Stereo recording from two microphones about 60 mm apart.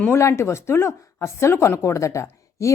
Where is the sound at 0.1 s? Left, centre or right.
Left.